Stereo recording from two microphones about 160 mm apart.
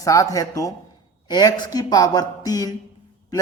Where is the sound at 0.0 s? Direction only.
20° left (ahead or behind).